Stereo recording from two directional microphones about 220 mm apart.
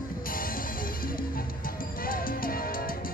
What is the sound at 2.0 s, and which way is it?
Music, 40° left (ahead or behind).